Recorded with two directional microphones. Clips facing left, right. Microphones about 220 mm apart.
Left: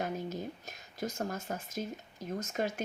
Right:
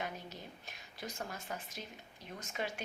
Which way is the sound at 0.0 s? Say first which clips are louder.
Left 8 dB; 45° left (ahead or behind).